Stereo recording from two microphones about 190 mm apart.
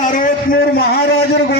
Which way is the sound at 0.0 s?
45° left (ahead or behind).